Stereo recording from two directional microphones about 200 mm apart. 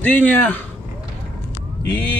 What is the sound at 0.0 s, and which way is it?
Speech, 10° left (ahead or behind).